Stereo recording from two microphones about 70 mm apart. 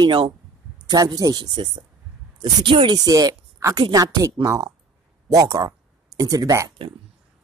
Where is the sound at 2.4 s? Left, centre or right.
Right.